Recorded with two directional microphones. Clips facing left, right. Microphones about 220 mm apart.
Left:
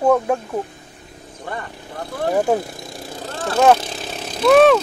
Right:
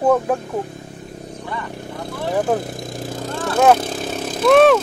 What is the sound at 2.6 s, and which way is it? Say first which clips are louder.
Vehicle: right 4 dB; 45° right (ahead or behind).